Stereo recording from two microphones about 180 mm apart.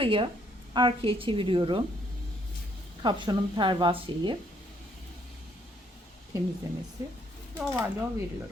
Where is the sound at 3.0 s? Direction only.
25° right (ahead or behind).